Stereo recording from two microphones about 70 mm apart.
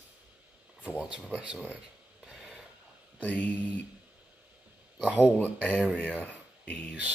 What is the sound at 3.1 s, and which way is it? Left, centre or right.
Speech, left.